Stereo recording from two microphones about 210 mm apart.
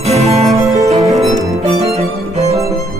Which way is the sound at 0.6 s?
15° right (ahead or behind).